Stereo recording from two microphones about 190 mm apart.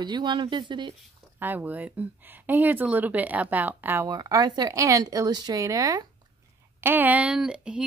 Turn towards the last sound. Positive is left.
turn(degrees=-5)  # may be behind; listen again after turning